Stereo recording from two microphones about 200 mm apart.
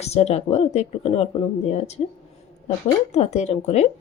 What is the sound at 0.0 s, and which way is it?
Speech, 30° left (ahead or behind).